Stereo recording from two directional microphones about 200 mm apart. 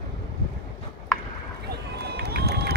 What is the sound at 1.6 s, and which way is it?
Run, 55° right (ahead or behind).